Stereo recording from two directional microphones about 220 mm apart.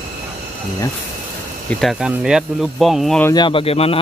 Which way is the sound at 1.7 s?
Centre (ahead or behind).